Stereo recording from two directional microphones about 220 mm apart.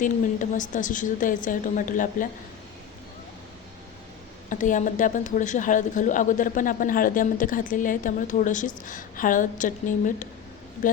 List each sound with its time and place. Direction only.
0.0 s a woman's voice: 35° left (ahead or behind)
4.4 s a woman's voice: 35° left (ahead or behind)